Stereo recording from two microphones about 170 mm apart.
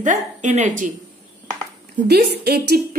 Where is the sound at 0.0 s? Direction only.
45° right (ahead or behind).